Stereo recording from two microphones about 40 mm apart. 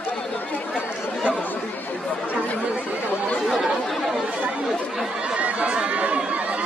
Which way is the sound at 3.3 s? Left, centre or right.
Centre.